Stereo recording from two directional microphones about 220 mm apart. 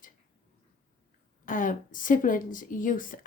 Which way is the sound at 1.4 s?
35° left (ahead or behind).